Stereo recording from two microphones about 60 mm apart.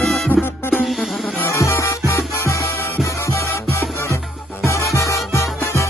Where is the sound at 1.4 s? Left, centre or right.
Left.